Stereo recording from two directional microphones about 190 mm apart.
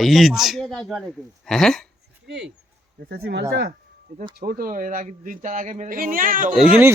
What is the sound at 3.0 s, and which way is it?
Speech, 55° right (ahead or behind).